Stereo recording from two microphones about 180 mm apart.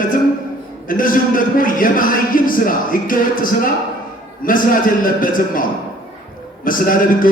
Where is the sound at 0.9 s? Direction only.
50° left (ahead or behind).